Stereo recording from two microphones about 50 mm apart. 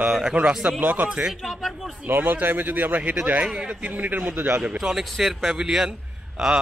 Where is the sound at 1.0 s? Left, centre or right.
Centre.